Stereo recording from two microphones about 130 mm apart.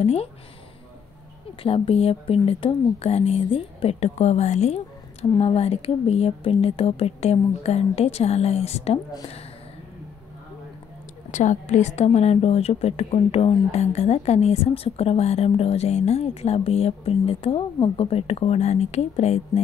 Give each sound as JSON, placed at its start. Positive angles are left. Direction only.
{"t": 0.0, "sound": "a woman's voice", "side_deg": 50}
{"t": 1.6, "sound": "a woman's voice", "side_deg": 45}
{"t": 11.3, "sound": "a woman's voice", "side_deg": 65}